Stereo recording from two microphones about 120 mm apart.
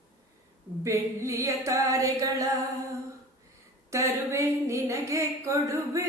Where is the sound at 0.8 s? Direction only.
25° right (ahead or behind).